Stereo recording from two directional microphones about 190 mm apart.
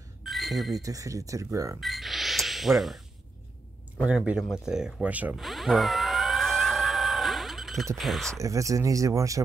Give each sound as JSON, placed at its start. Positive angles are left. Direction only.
{"t": 0.2, "sound": "a sound", "side_deg": 0}
{"t": 0.7, "sound": "speech", "side_deg": -20}
{"t": 1.8, "sound": "music", "side_deg": 0}
{"t": 4.0, "sound": "speech", "side_deg": -5}
{"t": 4.6, "sound": "a sound", "side_deg": -5}
{"t": 8.0, "sound": "speech", "side_deg": 0}
{"t": 8.4, "sound": "speech", "side_deg": -15}